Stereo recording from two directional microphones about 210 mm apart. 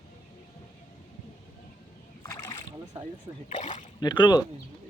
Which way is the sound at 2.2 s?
15° left (ahead or behind).